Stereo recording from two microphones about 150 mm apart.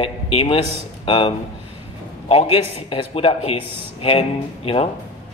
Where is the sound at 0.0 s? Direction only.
35° left (ahead or behind).